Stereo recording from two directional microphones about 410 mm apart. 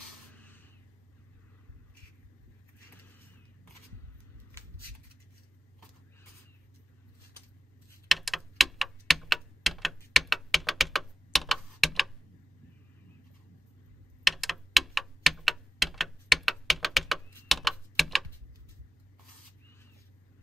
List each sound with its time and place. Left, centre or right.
8.1 s typewriter: centre
14.2 s typewriter: centre